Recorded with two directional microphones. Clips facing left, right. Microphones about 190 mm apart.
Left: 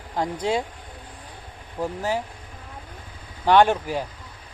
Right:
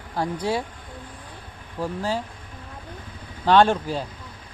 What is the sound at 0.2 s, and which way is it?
Speech, 20° left (ahead or behind).